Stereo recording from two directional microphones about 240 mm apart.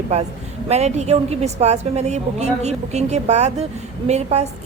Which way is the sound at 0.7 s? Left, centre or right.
Right.